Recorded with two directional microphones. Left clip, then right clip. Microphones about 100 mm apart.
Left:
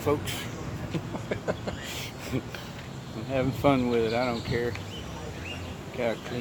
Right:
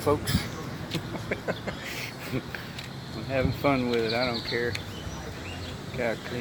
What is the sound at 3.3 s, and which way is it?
Speech, 30° left (ahead or behind).